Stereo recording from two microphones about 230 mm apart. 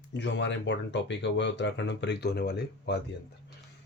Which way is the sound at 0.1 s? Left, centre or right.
Left.